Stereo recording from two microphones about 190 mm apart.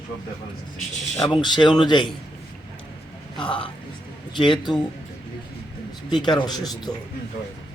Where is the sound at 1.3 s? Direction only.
25° left (ahead or behind).